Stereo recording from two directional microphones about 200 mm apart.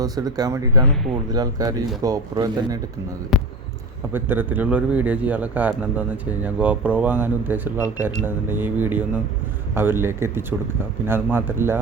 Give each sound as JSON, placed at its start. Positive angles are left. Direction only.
{"t": 0.0, "sound": "speech", "side_deg": -20}
{"t": 3.3, "sound": "speech", "side_deg": 0}